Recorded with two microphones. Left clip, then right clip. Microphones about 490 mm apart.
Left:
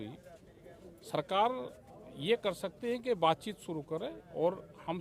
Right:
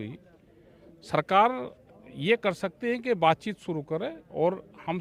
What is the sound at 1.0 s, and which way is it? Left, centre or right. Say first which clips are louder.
Speech: right 9 dB; right.